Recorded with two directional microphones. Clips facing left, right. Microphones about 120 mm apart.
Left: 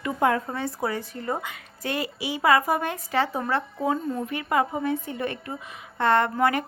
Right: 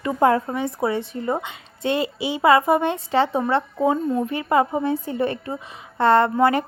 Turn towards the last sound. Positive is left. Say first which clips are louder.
# right 5 dB
turn(degrees=-30)  # may be behind; listen again after turning